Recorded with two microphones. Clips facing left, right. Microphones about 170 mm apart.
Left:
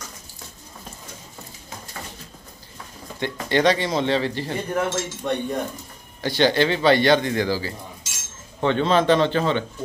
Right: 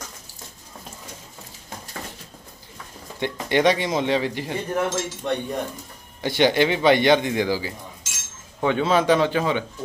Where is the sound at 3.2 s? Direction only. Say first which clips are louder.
Even; 15° right (ahead or behind).